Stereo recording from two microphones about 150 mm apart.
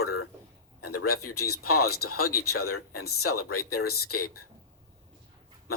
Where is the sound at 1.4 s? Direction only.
90° left.